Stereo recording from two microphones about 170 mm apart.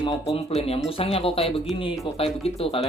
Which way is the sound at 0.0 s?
25° left (ahead or behind).